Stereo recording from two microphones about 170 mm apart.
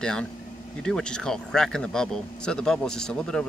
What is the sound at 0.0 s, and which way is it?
A man's voice, 5° left (ahead or behind).